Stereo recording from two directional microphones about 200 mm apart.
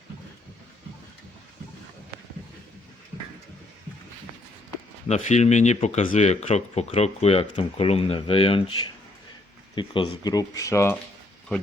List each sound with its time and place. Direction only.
5.0 s speech: 35° left (ahead or behind); by 10.9 s 15° left (ahead or behind)